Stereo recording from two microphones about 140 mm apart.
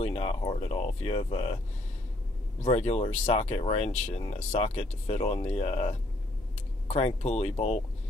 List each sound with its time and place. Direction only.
0.0 s speech: 50° left (ahead or behind)
2.6 s speech: 50° left (ahead or behind)